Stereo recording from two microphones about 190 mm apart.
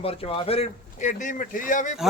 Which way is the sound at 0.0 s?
30° left (ahead or behind).